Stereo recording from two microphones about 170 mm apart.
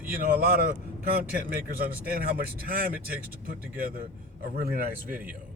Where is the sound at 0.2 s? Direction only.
60° right (ahead or behind).